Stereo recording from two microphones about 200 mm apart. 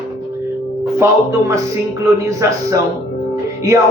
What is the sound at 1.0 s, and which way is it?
A man's voice, 15° right (ahead or behind).